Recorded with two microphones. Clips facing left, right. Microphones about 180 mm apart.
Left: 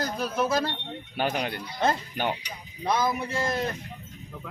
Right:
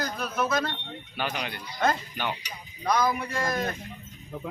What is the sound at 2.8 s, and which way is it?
Speech, 25° left (ahead or behind).